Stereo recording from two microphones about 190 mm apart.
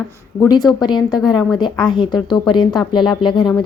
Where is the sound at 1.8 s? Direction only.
25° left (ahead or behind).